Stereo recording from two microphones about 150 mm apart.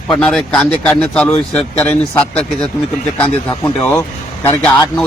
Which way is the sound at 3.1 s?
10° left (ahead or behind).